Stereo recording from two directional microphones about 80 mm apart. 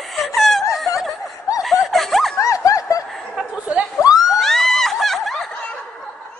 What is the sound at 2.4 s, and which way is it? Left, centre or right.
Snicker, left.